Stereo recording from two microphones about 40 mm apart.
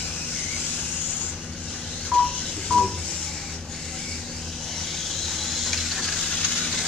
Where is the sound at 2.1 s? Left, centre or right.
Left.